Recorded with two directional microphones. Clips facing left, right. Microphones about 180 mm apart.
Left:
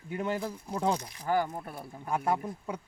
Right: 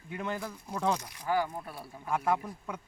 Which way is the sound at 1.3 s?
45° left (ahead or behind).